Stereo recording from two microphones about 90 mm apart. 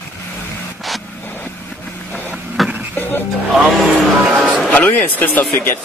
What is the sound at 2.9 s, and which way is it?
Music, 25° left (ahead or behind).